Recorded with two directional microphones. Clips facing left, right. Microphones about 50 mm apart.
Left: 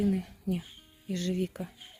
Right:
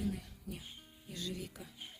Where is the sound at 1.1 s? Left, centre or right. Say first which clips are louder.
Left 12 dB; left.